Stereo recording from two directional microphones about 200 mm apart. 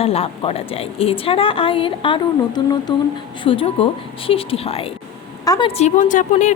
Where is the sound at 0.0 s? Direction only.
30° left (ahead or behind).